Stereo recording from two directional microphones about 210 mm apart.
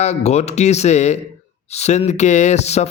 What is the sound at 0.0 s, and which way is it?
Mantra, 30° left (ahead or behind).